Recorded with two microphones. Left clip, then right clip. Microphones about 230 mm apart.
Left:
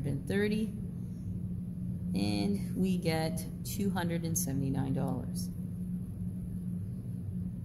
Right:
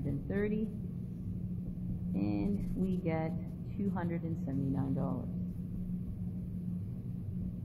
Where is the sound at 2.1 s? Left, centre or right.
Left.